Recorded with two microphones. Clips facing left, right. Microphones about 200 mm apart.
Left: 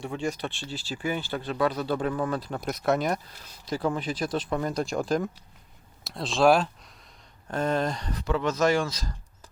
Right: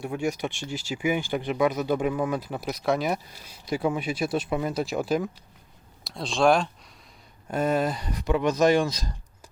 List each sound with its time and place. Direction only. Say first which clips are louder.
0.0 s speech: right 3 dB; 10° right (ahead or behind)
7.4 s speech: right 2 dB; 10° right (ahead or behind)